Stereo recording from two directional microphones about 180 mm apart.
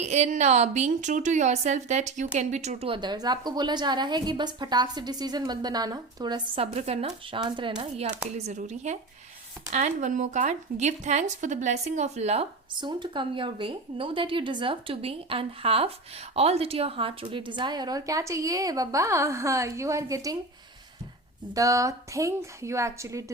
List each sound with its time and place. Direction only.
0.0 s a woman's voice: 40° right (ahead or behind)
6.7 s a woman's voice: 35° right (ahead or behind)
12.7 s a woman's voice: 25° right (ahead or behind)
21.5 s a woman's voice: 20° right (ahead or behind)